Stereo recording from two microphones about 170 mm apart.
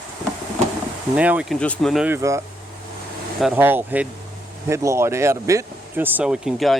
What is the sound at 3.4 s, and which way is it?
Speech, 10° right (ahead or behind).